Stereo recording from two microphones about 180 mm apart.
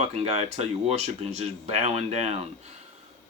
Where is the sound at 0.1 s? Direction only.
35° right (ahead or behind).